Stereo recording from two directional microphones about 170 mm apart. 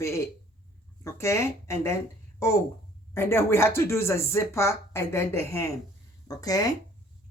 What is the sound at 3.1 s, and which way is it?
Speech, 15° left (ahead or behind).